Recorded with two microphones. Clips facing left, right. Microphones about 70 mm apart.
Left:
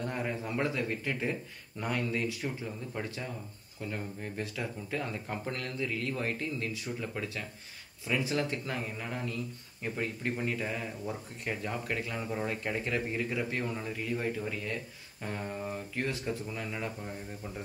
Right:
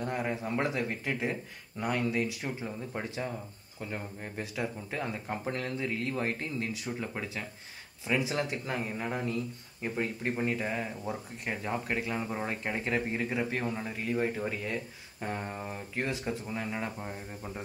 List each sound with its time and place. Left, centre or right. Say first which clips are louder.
0.0 s speech: right 2 dB; centre